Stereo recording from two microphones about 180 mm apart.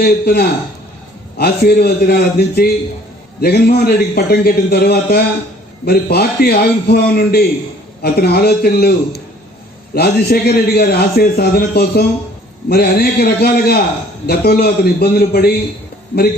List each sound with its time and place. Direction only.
0.0 s a man's voice: 60° left (ahead or behind)